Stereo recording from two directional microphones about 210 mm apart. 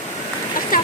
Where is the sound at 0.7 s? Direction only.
45° left (ahead or behind).